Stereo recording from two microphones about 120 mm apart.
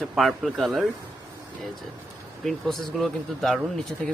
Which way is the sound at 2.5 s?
5° left (ahead or behind).